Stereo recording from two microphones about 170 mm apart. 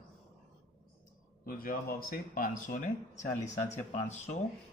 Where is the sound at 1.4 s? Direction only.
55° left (ahead or behind).